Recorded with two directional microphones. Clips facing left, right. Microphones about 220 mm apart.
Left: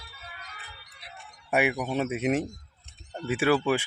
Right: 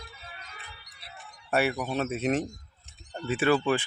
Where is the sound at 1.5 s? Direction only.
15° left (ahead or behind).